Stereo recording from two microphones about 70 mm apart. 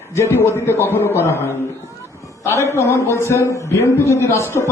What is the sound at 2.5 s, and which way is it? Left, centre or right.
A man's voice, left.